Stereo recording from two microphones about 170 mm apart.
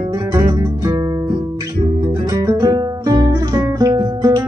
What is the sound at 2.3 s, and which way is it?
Guitar, 20° right (ahead or behind).